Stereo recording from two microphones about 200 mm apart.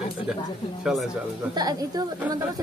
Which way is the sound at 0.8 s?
Centre (ahead or behind).